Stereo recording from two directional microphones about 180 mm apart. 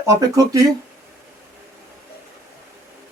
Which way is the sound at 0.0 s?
20° right (ahead or behind).